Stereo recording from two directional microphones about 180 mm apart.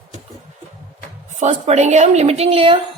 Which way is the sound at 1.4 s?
40° right (ahead or behind).